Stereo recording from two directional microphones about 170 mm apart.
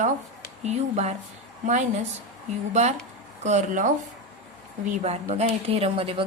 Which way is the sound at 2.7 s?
40° right (ahead or behind).